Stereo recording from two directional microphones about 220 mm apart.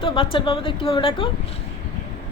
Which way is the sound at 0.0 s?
25° left (ahead or behind).